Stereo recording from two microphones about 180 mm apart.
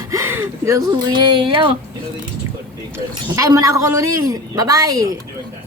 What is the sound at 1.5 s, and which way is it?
Speech, 30° right (ahead or behind).